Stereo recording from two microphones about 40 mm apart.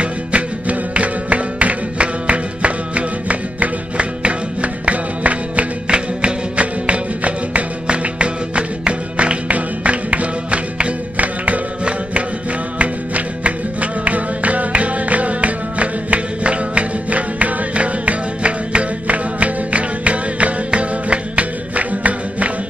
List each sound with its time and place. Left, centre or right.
0.0 s music: right
5.9 s music: right
12.7 s music: right